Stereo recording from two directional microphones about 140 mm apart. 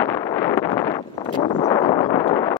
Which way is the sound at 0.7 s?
25° left (ahead or behind).